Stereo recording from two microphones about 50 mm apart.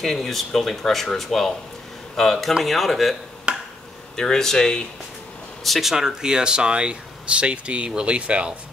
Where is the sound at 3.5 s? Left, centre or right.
Centre.